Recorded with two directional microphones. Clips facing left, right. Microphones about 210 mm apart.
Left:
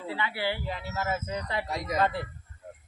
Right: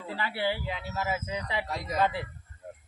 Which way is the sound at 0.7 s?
Centre (ahead or behind).